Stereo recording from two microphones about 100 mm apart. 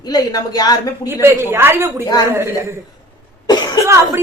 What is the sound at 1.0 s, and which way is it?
A woman's voice, 25° right (ahead or behind).